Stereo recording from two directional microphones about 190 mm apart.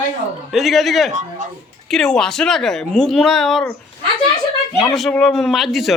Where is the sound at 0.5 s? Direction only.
Centre (ahead or behind).